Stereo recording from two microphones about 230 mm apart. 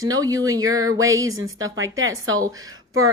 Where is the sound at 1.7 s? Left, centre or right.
Right.